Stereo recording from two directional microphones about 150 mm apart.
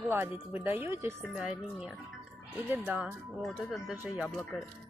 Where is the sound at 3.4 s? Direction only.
Centre (ahead or behind).